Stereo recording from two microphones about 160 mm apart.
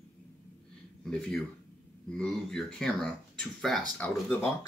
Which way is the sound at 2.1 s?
5° left (ahead or behind).